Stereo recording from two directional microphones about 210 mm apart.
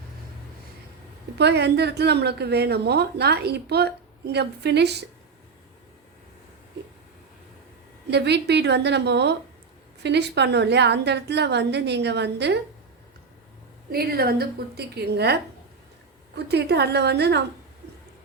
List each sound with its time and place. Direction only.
1.4 s a woman's voice: 55° right (ahead or behind)
8.1 s a woman's voice: 55° right (ahead or behind)
13.9 s a woman's voice: 45° right (ahead or behind)